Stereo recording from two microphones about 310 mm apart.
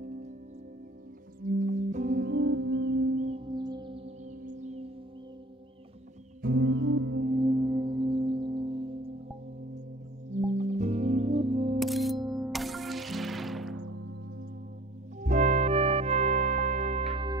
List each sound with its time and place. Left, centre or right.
0.0 s music: right
1.4 s music: right
6.4 s music: right
7.2 s singing bowl: centre
10.3 s music: right
11.8 s music: centre
12.2 s music: centre
12.4 s music: centre
15.1 s music: right